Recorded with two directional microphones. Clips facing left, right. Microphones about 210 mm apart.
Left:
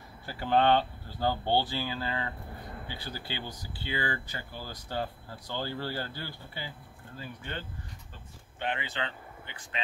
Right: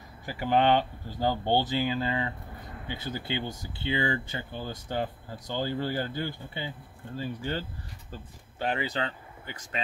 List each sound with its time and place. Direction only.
0.3 s speech: 15° right (ahead or behind)
7.2 s speech: 30° right (ahead or behind)